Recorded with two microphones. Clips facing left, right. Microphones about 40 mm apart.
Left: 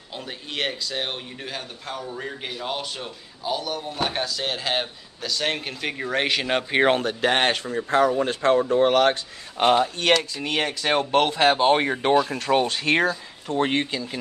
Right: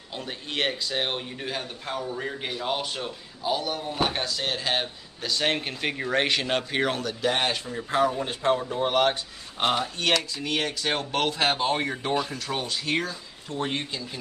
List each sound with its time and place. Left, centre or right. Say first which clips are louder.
0.1 s speech: even; centre
5.2 s speech: even; centre
6.8 s speech: left 6 dB; left
8.2 s speech: left 5 dB; left
9.6 s speech: left 6 dB; left
12.3 s speech: left 9 dB; left
13.6 s speech: left 7 dB; left